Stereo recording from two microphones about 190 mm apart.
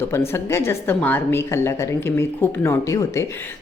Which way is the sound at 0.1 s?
15° left (ahead or behind).